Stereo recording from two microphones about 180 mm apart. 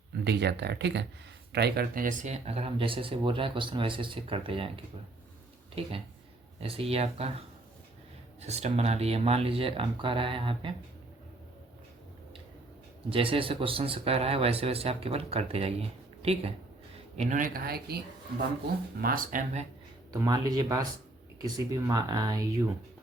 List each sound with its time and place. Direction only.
0.3 s speech: 70° right (ahead or behind); by 4.7 s 30° right (ahead or behind)
6.6 s speech: 30° right (ahead or behind)
13.1 s speech: 30° right (ahead or behind)
17.2 s speech: 45° right (ahead or behind)
18.9 s speech: 55° right (ahead or behind)
20.2 s speech: 20° right (ahead or behind)